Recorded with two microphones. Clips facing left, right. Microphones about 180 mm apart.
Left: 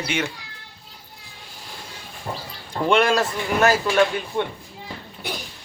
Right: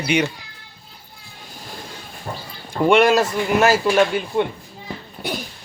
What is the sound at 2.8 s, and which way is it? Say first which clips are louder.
Speech: right 4 dB; 10° right (ahead or behind).